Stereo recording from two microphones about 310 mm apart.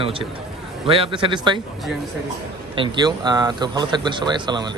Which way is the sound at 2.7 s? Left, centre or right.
Centre.